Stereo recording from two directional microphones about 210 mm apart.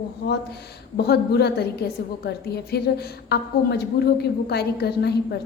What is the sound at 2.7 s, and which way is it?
Speech, 50° left (ahead or behind).